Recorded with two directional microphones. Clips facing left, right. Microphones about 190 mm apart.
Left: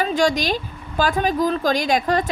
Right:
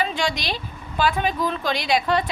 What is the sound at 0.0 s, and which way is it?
A woman's voice, 45° left (ahead or behind).